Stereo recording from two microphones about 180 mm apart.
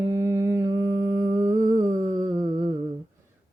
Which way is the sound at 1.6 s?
45° right (ahead or behind).